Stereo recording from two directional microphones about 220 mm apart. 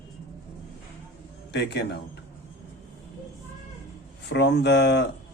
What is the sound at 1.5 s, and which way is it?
Speech, 50° left (ahead or behind).